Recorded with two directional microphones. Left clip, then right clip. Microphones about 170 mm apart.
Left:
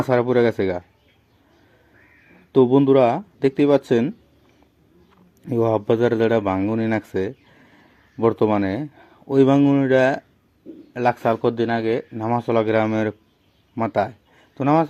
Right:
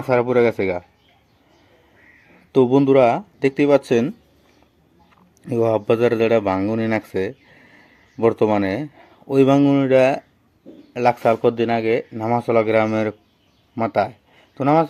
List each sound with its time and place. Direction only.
0.1 s speech: 20° left (ahead or behind)
2.6 s speech: 15° left (ahead or behind)
5.5 s speech: 15° left (ahead or behind)
13.7 s a sound: 15° left (ahead or behind)